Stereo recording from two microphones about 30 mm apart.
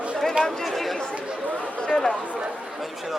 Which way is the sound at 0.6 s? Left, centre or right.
Centre.